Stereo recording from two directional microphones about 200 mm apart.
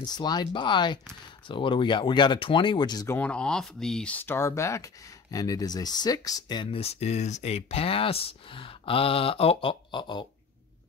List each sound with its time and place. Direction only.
0.0 s speech: 20° left (ahead or behind)
3.2 s speech: 5° left (ahead or behind); by 10.2 s 20° left (ahead or behind)